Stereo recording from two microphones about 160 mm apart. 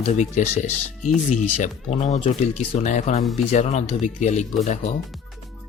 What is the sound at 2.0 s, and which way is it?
Speech, 40° left (ahead or behind).